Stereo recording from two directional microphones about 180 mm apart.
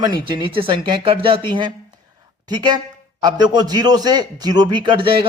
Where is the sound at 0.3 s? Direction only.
30° right (ahead or behind).